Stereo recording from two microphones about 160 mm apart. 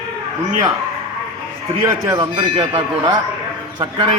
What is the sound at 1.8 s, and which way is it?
A man's voice, 25° right (ahead or behind).